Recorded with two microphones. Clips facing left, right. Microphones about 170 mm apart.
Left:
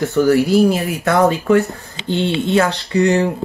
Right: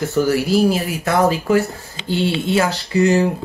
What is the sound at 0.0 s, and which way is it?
Speech, centre (ahead or behind).